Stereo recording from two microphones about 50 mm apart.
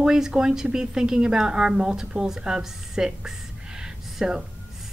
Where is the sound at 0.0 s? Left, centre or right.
Centre.